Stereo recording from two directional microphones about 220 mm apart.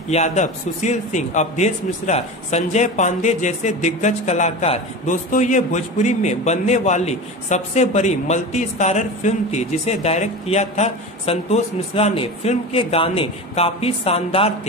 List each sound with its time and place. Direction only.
0.1 s a man's voice: 30° left (ahead or behind)